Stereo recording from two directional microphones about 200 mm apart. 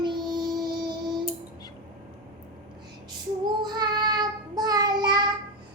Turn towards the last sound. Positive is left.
turn(degrees=-20)  # may be behind; listen again after turning